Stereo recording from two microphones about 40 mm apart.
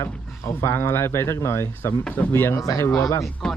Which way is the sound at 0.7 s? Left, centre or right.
Left.